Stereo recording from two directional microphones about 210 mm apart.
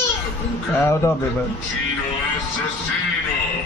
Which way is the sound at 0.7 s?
10° left (ahead or behind).